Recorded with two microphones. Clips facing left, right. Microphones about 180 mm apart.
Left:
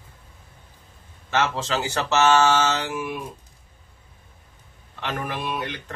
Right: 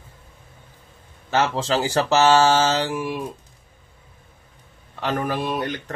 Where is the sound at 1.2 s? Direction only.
30° right (ahead or behind).